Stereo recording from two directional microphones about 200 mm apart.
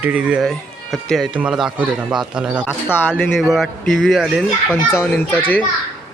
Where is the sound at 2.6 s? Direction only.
10° left (ahead or behind).